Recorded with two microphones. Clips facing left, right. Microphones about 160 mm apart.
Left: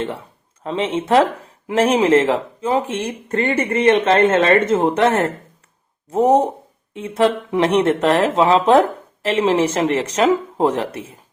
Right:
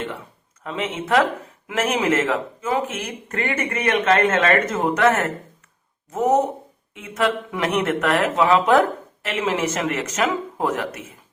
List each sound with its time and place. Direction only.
0.6 s speech: 30° left (ahead or behind)